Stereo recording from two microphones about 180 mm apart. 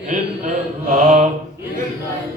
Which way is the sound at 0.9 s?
40° right (ahead or behind).